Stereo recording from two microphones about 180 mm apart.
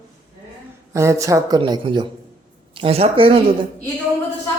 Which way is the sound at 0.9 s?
15° right (ahead or behind).